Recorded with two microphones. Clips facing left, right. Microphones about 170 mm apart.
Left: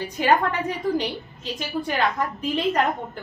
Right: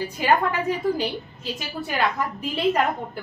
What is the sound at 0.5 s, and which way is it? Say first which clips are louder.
A woman's voice: right 1 dB; 5° right (ahead or behind).